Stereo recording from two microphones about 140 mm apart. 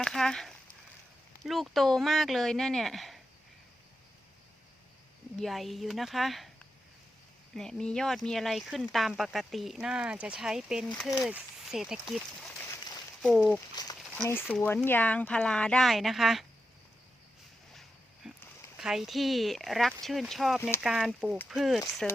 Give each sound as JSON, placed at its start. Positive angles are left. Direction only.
{"t": 0.0, "sound": "speech", "side_deg": 5}
{"t": 5.4, "sound": "speech", "side_deg": 0}
{"t": 7.5, "sound": "speech", "side_deg": 5}
{"t": 12.6, "sound": "a sound", "side_deg": 25}
{"t": 13.2, "sound": "speech", "side_deg": 0}
{"t": 13.8, "sound": "speech", "side_deg": 30}
{"t": 14.3, "sound": "speech", "side_deg": 15}
{"t": 17.7, "sound": "a sound", "side_deg": -5}
{"t": 18.8, "sound": "speech", "side_deg": -5}
{"t": 20.6, "sound": "speech", "side_deg": 15}
{"t": 20.8, "sound": "speech", "side_deg": -5}